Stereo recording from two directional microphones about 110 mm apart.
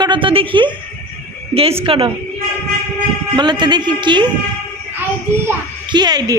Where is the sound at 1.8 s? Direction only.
60° right (ahead or behind).